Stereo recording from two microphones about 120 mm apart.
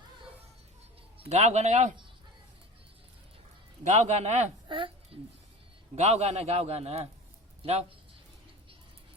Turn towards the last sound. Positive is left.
turn(degrees=-60)  # may be behind; listen again after turning